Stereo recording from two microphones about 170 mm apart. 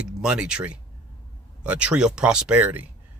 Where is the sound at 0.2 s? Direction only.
5° right (ahead or behind).